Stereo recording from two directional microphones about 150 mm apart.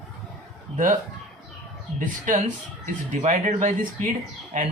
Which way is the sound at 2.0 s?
60° right (ahead or behind).